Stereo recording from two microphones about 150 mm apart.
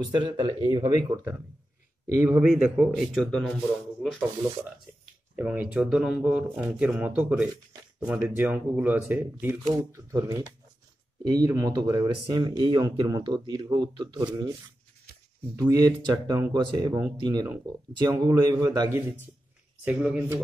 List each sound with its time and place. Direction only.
0.1 s speech: 30° right (ahead or behind)
2.2 s a man's voice: 10° right (ahead or behind)
5.3 s speech: 10° right (ahead or behind); by 14.5 s 30° right (ahead or behind)
15.5 s speech: 25° right (ahead or behind); by 20.2 s 5° right (ahead or behind)